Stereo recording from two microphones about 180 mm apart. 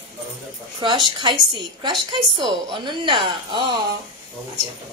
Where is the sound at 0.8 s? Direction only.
25° right (ahead or behind).